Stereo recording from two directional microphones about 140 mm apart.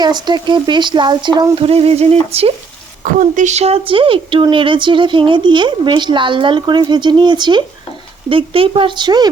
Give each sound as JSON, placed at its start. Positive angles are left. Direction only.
{"t": 0.0, "sound": "speech", "side_deg": -30}
{"t": 3.0, "sound": "speech", "side_deg": -65}